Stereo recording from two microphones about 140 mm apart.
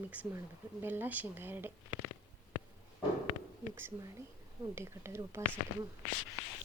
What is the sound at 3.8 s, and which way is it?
Speech, 15° right (ahead or behind).